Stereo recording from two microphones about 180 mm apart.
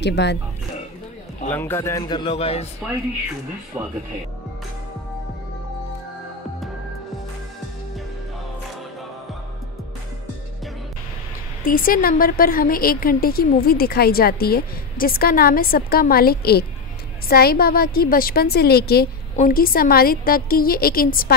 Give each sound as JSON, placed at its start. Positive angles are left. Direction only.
{"t": 0.0, "sound": "speech", "side_deg": 75}
{"t": 1.5, "sound": "a man's voice", "side_deg": 10}
{"t": 3.8, "sound": "speech", "side_deg": -5}
{"t": 11.6, "sound": "a woman's voice", "side_deg": 50}